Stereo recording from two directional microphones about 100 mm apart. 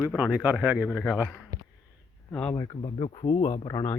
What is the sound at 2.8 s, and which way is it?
Speech, 65° left (ahead or behind).